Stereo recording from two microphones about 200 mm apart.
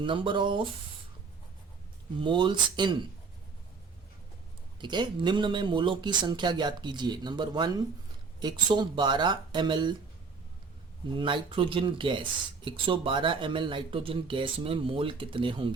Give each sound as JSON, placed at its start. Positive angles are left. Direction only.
{"t": 0.0, "sound": "speech", "side_deg": -25}
{"t": 2.2, "sound": "speech", "side_deg": -25}
{"t": 4.8, "sound": "speech", "side_deg": -25}
{"t": 11.1, "sound": "speech", "side_deg": -25}